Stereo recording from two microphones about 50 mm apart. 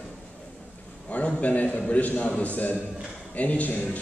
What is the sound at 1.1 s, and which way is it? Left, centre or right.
A man's voice, left.